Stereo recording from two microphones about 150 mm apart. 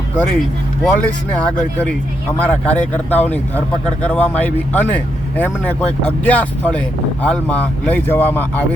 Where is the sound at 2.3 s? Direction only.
10° left (ahead or behind).